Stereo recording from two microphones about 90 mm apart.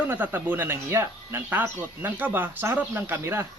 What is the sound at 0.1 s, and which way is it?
Speech, 25° right (ahead or behind).